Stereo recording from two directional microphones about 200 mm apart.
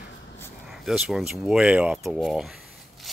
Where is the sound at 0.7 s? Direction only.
Centre (ahead or behind).